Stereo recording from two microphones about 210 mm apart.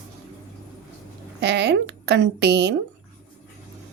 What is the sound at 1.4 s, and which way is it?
Speech, 55° right (ahead or behind).